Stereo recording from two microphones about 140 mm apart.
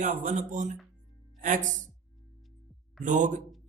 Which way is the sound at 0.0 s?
60° right (ahead or behind).